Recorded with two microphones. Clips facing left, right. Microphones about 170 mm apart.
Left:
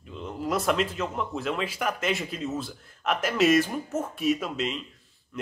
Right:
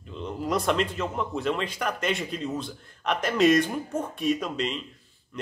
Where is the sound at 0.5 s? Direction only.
Centre (ahead or behind).